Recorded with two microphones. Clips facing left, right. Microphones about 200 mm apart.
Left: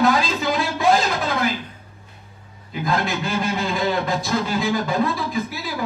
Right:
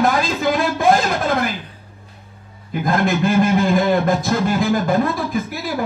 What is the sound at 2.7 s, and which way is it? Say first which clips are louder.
Speech: right 5 dB; 50° right (ahead or behind).